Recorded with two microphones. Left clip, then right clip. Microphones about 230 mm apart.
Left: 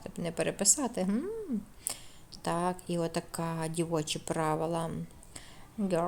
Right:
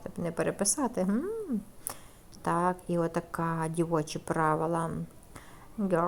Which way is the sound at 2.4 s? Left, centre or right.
Centre.